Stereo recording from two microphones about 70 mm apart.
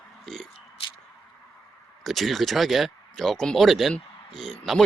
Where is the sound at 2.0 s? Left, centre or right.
Centre.